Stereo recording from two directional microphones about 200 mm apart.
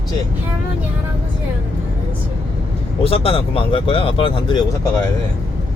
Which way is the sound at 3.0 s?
30° left (ahead or behind).